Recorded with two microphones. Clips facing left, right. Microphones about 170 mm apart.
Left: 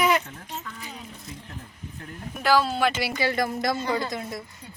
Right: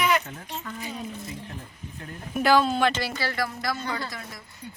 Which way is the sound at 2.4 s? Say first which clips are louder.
Right 1 dB; centre (ahead or behind).